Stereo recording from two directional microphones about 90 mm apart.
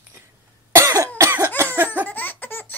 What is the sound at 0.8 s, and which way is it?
Cough, 35° right (ahead or behind).